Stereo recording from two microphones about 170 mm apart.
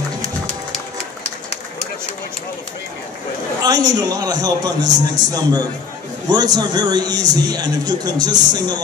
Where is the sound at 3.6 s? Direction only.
25° right (ahead or behind).